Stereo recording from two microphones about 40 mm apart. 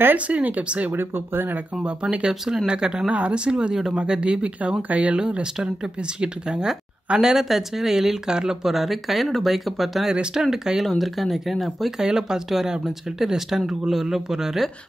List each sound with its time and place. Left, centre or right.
0.3 s speech: right
0.9 s speech: right
1.8 s speech: right
3.1 s speech: right
5.2 s speech: right
7.2 s speech: centre
10.9 s speech: centre
12.0 s speech: centre